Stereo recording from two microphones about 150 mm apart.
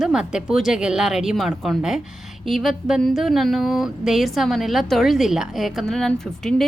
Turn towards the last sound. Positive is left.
turn(degrees=5)  # may be behind; listen again after turning